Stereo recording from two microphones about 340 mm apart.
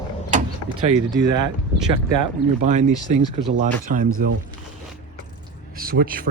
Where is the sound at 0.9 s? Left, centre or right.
Centre.